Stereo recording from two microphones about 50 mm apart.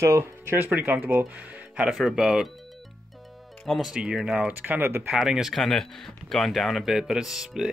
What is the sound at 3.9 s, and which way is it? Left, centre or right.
Speech, centre.